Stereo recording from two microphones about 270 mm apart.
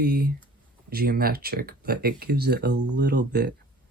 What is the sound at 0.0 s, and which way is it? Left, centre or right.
Speech, right.